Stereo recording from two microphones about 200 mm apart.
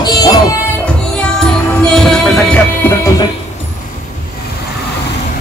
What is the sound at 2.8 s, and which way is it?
Music, 15° left (ahead or behind).